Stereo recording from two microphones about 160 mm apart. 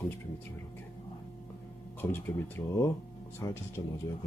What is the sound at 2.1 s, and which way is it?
Speech, 15° left (ahead or behind).